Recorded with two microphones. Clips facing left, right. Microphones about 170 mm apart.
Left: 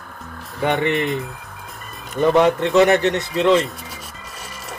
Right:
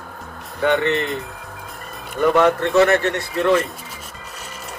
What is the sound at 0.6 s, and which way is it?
Speech, 15° left (ahead or behind).